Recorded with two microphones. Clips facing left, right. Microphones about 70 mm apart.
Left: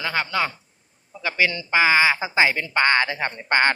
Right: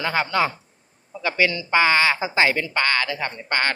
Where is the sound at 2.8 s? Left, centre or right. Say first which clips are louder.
Left 3 dB; left.